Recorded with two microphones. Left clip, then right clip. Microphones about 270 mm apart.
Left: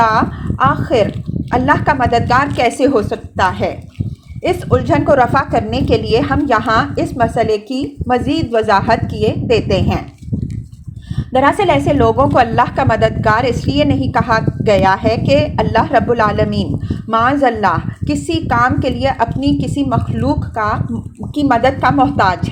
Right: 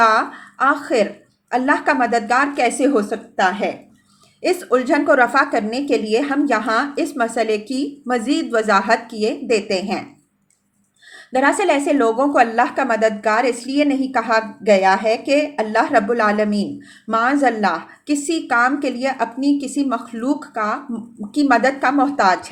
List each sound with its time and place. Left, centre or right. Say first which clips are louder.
0.6 s a woman's voice: left 3 dB; centre
11.3 s a woman's voice: left 4 dB; left